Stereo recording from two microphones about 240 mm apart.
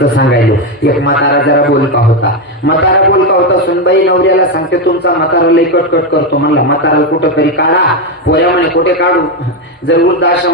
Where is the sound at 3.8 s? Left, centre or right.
Left.